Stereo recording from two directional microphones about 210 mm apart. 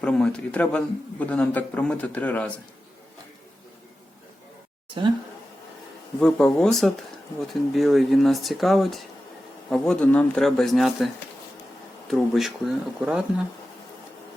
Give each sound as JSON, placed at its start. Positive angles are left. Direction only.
{"t": 0.0, "sound": "a man's voice", "side_deg": 5}
{"t": 6.1, "sound": "speech", "side_deg": 5}